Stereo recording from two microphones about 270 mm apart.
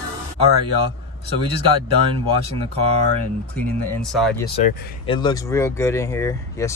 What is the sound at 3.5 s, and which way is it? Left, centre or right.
Speech, centre.